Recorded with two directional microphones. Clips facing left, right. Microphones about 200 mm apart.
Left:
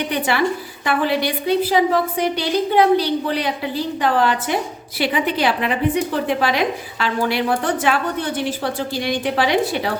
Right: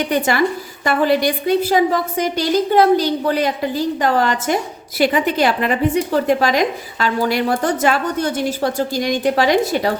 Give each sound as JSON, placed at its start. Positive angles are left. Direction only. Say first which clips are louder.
{"t": 0.1, "sound": "a woman's voice", "louder": "right 2 dB", "side_deg": -45}